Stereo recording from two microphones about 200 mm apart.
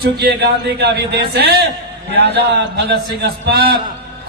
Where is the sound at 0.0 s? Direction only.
50° right (ahead or behind).